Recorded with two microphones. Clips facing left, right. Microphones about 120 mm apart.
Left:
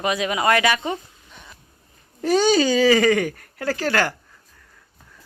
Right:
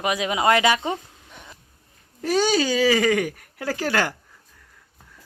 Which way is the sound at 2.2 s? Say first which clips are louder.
Left 3 dB; centre (ahead or behind).